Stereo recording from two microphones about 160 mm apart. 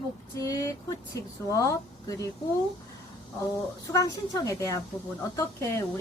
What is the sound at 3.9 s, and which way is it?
A woman's voice, 20° left (ahead or behind).